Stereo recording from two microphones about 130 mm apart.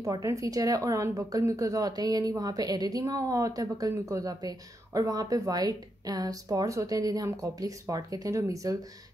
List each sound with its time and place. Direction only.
0.0 s a woman's voice: 25° right (ahead or behind)